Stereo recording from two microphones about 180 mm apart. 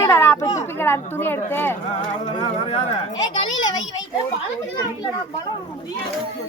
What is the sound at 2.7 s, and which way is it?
Speech, 30° left (ahead or behind).